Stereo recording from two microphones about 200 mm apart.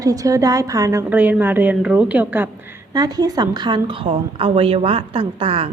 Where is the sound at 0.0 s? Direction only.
15° right (ahead or behind).